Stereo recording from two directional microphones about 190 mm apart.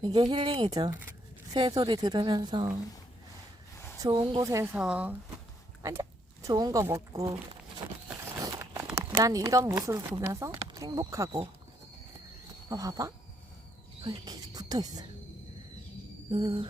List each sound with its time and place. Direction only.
0.0 s speech: 20° right (ahead or behind)
3.9 s speech: 20° right (ahead or behind)
5.8 s speech: 15° right (ahead or behind)
8.4 s crumpling: 15° right (ahead or behind)
9.0 s speech: 20° right (ahead or behind)
12.6 s speech: 20° right (ahead or behind)
16.3 s speech: 25° right (ahead or behind)